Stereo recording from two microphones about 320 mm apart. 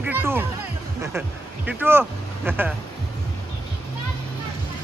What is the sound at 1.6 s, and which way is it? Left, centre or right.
Speech, centre.